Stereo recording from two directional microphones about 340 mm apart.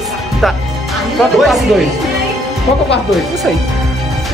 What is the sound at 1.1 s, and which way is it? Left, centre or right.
Speech, centre.